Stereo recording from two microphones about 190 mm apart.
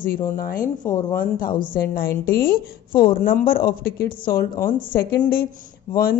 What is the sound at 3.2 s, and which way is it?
Speech, 45° left (ahead or behind).